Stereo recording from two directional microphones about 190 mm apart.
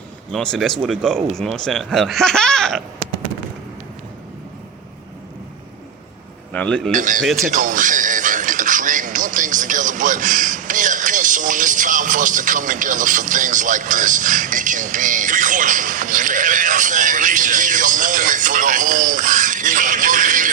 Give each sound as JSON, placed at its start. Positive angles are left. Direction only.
{"t": 0.3, "sound": "speech", "side_deg": 5}
{"t": 6.5, "sound": "speech", "side_deg": 5}
{"t": 6.9, "sound": "speech", "side_deg": -45}
{"t": 7.4, "sound": "a sound", "side_deg": -45}